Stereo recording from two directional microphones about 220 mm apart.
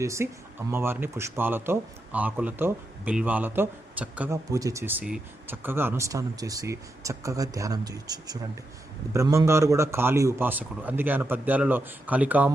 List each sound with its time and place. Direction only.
0.0 s a man's voice: 15° right (ahead or behind)